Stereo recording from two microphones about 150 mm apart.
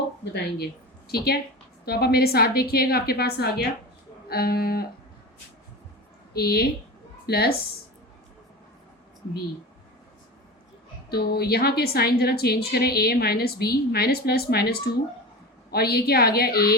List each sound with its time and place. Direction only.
0.4 s a woman's voice: 90° left
6.3 s a woman's voice: 90° left
11.1 s a woman's voice: 90° left